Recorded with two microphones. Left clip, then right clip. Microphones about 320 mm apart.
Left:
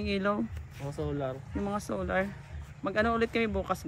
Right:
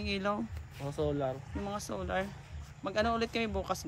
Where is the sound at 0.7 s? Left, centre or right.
Right.